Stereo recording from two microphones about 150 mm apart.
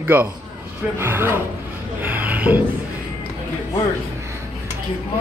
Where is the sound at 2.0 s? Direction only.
10° right (ahead or behind).